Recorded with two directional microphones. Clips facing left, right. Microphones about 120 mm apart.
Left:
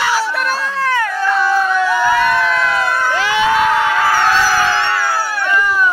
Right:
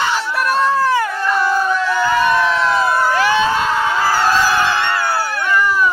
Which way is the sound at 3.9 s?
10° right (ahead or behind).